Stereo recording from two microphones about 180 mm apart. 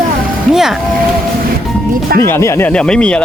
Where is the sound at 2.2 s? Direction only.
15° left (ahead or behind).